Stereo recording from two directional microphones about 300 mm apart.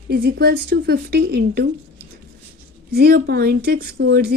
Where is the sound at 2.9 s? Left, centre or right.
Right.